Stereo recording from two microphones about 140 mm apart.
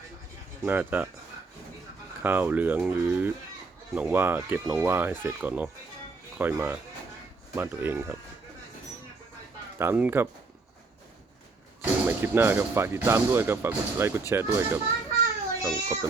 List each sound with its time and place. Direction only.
0.6 s speech: 15° right (ahead or behind)
2.2 s speech: 10° right (ahead or behind)
9.7 s speech: 15° right (ahead or behind)
11.8 s a child's voice: 15° right (ahead or behind)